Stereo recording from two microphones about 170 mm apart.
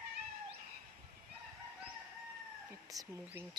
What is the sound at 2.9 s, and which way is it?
Speech, 15° right (ahead or behind).